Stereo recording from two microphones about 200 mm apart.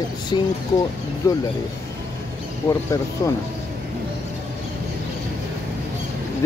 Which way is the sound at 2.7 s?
15° left (ahead or behind).